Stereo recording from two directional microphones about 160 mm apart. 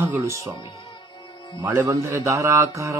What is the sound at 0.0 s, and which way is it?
Speech, 15° right (ahead or behind).